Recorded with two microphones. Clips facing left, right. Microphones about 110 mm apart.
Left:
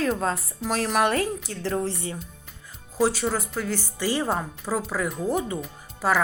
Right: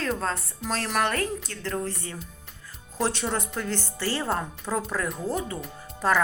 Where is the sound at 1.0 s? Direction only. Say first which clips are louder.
Left 4 dB; 15° left (ahead or behind).